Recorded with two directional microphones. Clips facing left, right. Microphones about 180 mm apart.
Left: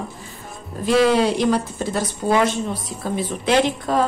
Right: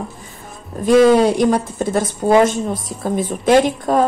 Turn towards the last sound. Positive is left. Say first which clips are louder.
# right 5 dB
turn(degrees=-45)  # may be behind; listen again after turning